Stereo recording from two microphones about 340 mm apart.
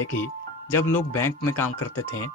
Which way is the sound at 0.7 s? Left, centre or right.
Centre.